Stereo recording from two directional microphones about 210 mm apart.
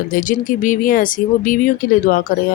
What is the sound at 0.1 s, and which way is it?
A woman's voice, 40° left (ahead or behind).